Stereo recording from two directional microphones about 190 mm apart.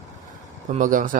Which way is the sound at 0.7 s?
45° right (ahead or behind).